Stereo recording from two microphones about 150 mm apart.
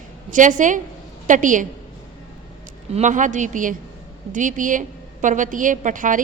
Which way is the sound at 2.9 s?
55° right (ahead or behind).